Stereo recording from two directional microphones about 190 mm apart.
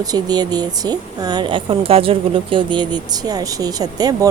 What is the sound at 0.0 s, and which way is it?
Speech, 20° right (ahead or behind).